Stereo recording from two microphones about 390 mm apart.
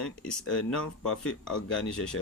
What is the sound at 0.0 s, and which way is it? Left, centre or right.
Speech, centre.